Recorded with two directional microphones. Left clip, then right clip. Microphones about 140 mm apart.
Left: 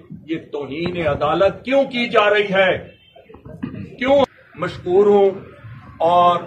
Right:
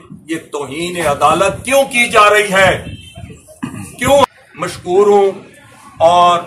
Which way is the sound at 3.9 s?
15° right (ahead or behind).